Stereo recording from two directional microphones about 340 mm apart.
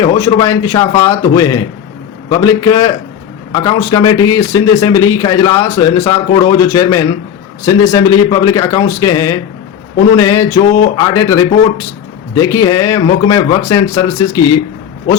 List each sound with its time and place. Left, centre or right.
0.0 s a man's voice: centre